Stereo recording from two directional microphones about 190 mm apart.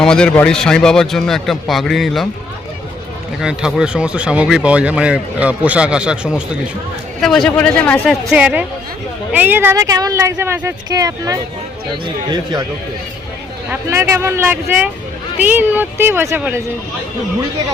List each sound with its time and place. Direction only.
0.0 s speech: 5° left (ahead or behind)
3.4 s speech: 5° right (ahead or behind)
8.3 s speech: 5° right (ahead or behind); by 12.6 s 20° right (ahead or behind)
13.7 s speech: 10° right (ahead or behind)